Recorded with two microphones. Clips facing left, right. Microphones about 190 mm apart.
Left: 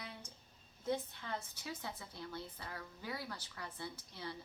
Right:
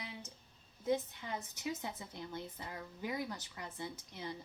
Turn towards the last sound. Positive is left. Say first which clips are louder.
# right 2 dB
turn(degrees=-20)  # may be behind; listen again after turning